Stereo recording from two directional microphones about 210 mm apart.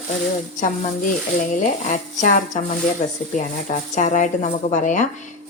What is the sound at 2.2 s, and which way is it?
Speech, 35° left (ahead or behind).